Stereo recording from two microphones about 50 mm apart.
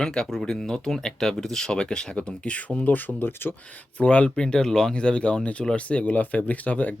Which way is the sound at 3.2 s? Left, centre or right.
Left.